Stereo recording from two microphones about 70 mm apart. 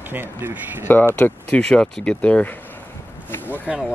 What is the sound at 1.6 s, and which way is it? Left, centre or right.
Speech, centre.